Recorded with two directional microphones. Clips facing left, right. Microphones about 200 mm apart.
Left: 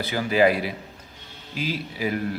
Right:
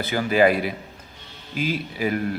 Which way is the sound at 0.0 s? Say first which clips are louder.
Right 1 dB; 50° right (ahead or behind).